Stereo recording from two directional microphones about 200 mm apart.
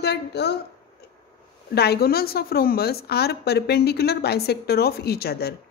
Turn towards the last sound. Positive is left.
turn(degrees=50)  # may be behind; listen again after turning